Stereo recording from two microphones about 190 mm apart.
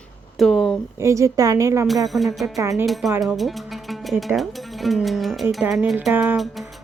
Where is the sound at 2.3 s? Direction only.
Centre (ahead or behind).